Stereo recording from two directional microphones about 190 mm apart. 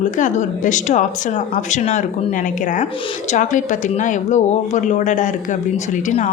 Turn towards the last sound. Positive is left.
turn(degrees=40)  # may be behind; listen again after turning